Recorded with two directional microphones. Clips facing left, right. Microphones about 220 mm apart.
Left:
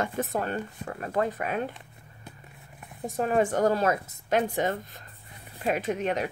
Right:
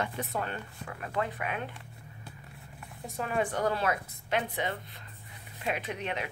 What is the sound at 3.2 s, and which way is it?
Speech, 40° left (ahead or behind).